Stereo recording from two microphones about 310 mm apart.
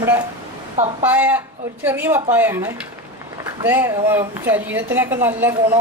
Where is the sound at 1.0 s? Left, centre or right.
Centre.